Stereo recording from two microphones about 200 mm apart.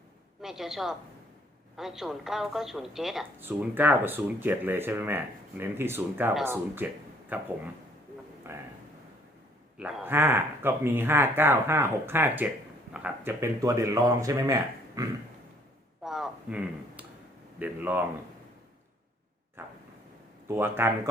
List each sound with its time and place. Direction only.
0.4 s a man's voice: centre (ahead or behind)
8.5 s a woman's voice: 15° right (ahead or behind)
9.7 s a woman's voice: 10° right (ahead or behind)
16.0 s a sound: centre (ahead or behind)
17.6 s a woman's voice: 10° right (ahead or behind)
19.6 s vehicle: 10° right (ahead or behind)
20.5 s a woman's voice: 10° right (ahead or behind)